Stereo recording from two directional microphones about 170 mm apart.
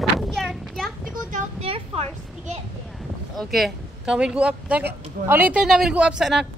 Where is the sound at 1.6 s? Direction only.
35° right (ahead or behind).